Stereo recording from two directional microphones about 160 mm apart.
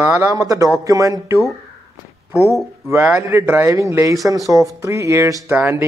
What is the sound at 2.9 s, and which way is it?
A man's voice, 10° right (ahead or behind).